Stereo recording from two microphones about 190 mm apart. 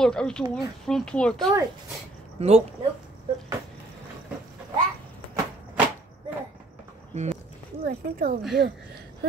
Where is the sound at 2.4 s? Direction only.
35° right (ahead or behind).